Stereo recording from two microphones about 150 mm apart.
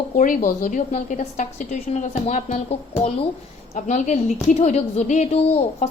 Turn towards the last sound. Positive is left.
turn(degrees=45)  # may be behind; listen again after turning